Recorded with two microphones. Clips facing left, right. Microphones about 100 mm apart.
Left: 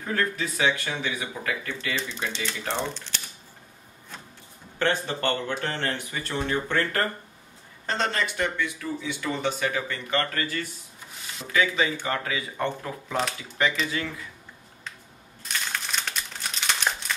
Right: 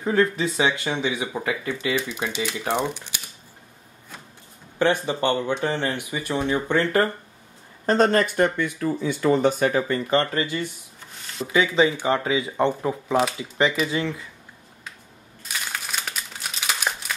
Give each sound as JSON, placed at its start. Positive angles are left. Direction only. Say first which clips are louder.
{"t": 0.0, "sound": "speech", "louder": "right 7 dB", "side_deg": -20}
{"t": 4.7, "sound": "speech", "louder": "right 5 dB", "side_deg": -15}
{"t": 7.8, "sound": "speech", "louder": "right 9 dB", "side_deg": -45}
{"t": 15.4, "sound": "crumpling", "louder": "even", "side_deg": -5}